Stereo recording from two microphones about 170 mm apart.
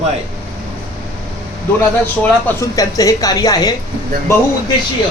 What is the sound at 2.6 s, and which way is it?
A man's voice, 20° left (ahead or behind).